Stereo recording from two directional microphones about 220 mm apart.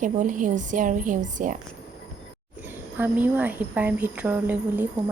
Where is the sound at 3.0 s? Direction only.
10° right (ahead or behind).